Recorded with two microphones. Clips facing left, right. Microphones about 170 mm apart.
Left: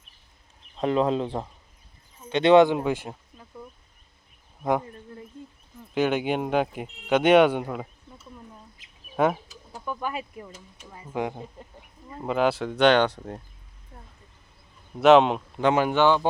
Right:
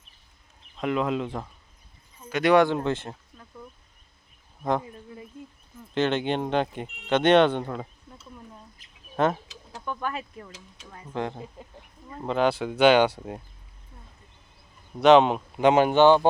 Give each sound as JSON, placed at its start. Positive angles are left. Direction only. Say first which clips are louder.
{"t": 0.8, "sound": "speech", "louder": "left 3 dB", "side_deg": 35}
{"t": 5.9, "sound": "speech", "louder": "left 1 dB", "side_deg": 10}
{"t": 9.1, "sound": "speech", "louder": "left 1 dB", "side_deg": 10}
{"t": 11.6, "sound": "speech", "louder": "even", "side_deg": 0}
{"t": 14.9, "sound": "speech", "louder": "even", "side_deg": 5}
{"t": 15.6, "sound": "speech", "louder": "right 3 dB", "side_deg": -20}